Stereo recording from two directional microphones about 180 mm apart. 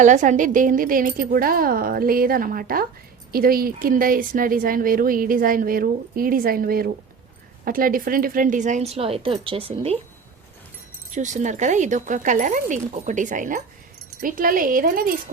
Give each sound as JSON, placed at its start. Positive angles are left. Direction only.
{"t": 0.0, "sound": "speech", "side_deg": -45}
{"t": 11.1, "sound": "speech", "side_deg": -40}